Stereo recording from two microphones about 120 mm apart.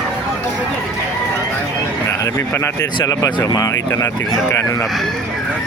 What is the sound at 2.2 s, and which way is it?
Speech, 25° left (ahead or behind).